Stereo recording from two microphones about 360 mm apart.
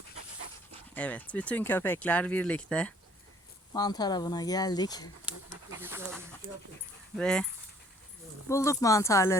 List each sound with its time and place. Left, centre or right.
0.9 s speech: centre
5.2 s pant: centre
7.2 s speech: centre
8.4 s speech: centre